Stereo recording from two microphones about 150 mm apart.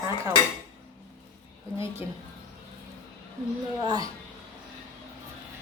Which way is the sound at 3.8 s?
25° right (ahead or behind).